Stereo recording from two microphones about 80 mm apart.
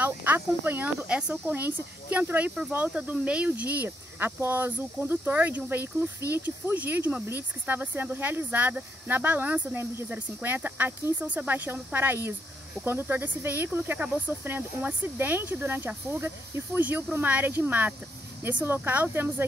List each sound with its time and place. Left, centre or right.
0.0 s speech: right